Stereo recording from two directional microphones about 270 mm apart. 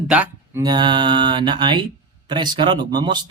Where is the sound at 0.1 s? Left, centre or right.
Centre.